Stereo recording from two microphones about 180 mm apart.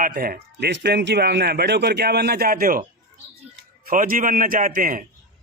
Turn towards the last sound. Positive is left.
turn(degrees=-50)  # may be behind; listen again after turning